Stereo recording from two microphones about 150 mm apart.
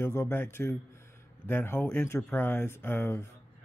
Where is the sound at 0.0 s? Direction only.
15° left (ahead or behind).